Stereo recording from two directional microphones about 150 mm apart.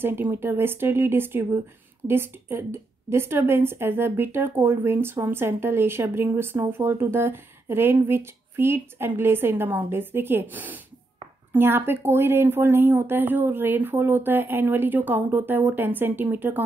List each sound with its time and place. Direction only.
0.0 s a woman's voice: 15° right (ahead or behind)